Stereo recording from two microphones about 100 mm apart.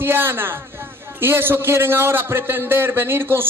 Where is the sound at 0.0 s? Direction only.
20° right (ahead or behind).